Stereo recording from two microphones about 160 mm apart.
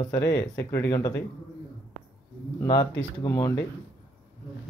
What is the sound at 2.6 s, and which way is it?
Speech, 25° left (ahead or behind).